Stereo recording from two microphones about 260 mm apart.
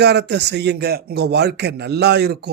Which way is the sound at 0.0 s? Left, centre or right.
Right.